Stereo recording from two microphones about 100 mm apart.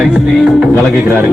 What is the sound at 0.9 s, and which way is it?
Music, 15° right (ahead or behind).